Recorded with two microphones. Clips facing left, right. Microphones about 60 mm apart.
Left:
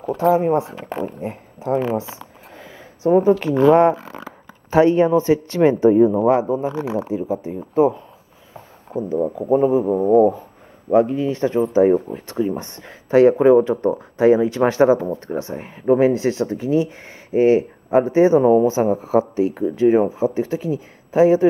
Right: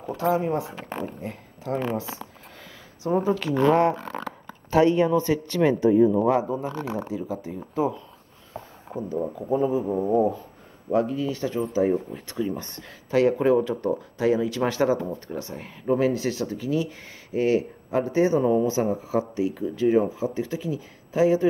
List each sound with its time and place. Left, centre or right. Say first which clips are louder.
0.4 s speech: left 8 dB; left
0.7 s speech: left 6 dB; centre
1.2 s speech: left 7 dB; left
2.0 s a sound: left 5 dB; left
3.5 s a man's voice: left 6 dB; centre
3.9 s a sound: left 2 dB; centre
4.6 s speech: left 5 dB; left
6.4 s a man's voice: left 7 dB; centre
7.2 s speech: left 7 dB; left
9.1 s speech: left 7 dB; left
9.5 s speech: left 7 dB; left